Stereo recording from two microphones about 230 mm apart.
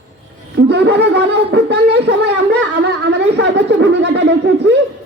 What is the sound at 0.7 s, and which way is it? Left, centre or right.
Speech, right.